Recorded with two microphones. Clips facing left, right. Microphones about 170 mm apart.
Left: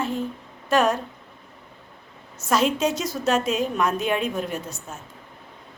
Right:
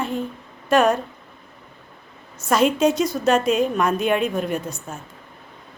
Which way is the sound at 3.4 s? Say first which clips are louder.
Right 4 dB; 55° right (ahead or behind).